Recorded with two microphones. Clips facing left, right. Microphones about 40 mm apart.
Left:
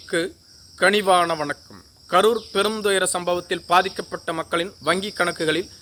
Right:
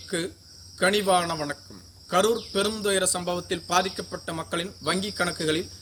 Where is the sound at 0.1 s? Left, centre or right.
Left.